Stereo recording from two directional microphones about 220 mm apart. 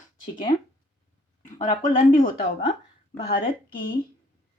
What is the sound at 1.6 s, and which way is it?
Speech, 35° left (ahead or behind).